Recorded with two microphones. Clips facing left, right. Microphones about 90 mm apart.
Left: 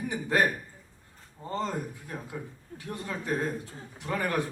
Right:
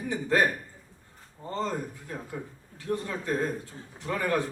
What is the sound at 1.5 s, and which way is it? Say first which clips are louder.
A woman's voice: right 1 dB; 15° left (ahead or behind).